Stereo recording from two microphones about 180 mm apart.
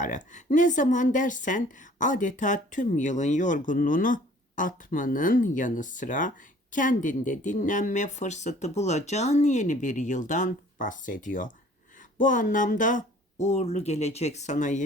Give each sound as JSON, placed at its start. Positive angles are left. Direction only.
{"t": 0.0, "sound": "speech", "side_deg": 45}